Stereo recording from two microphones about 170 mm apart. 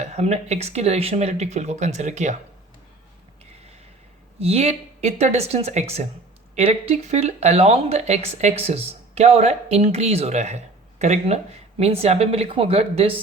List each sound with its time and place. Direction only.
0.0 s speech: 40° right (ahead or behind)
4.4 s speech: 35° right (ahead or behind)